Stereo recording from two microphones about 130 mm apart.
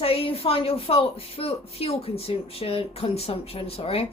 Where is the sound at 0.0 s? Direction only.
45° left (ahead or behind).